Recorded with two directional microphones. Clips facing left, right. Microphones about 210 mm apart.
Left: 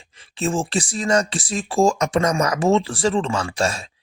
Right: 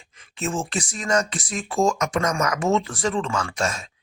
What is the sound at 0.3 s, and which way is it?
Speech, 30° left (ahead or behind).